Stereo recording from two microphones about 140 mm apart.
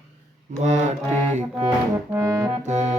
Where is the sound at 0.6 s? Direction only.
55° right (ahead or behind).